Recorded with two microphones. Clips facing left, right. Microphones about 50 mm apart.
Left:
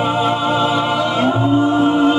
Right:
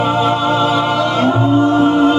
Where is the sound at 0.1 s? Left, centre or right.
Centre.